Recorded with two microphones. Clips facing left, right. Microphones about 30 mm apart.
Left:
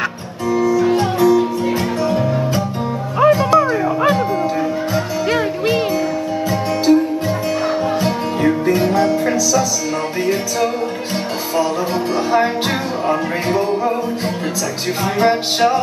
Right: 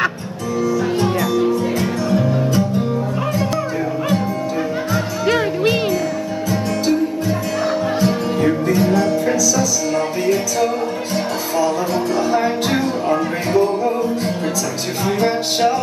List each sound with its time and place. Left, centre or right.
0.6 s music: centre
5.2 s music: centre
6.9 s music: centre
8.6 s music: left
11.6 s music: left
12.7 s music: centre